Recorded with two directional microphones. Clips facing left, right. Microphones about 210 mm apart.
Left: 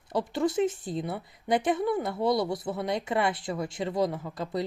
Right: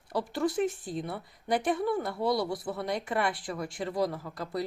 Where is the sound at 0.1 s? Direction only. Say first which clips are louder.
Left 2 dB; 20° left (ahead or behind).